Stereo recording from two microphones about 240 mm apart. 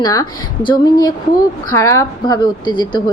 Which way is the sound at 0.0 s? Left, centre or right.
Centre.